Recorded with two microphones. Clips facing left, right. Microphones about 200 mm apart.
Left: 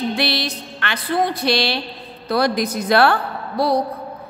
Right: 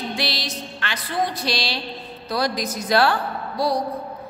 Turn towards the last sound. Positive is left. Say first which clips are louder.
# left 3 dB
turn(degrees=60)  # may be behind; listen again after turning